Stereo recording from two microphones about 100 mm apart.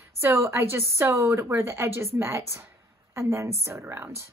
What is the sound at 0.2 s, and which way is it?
A woman's voice, 25° right (ahead or behind).